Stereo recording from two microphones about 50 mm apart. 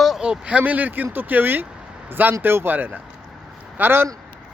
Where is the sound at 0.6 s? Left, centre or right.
Right.